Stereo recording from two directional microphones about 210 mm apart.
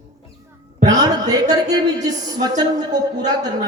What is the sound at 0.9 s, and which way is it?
Speech, 20° right (ahead or behind).